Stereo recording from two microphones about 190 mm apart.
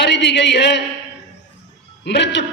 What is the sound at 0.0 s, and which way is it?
Speech, 65° left (ahead or behind).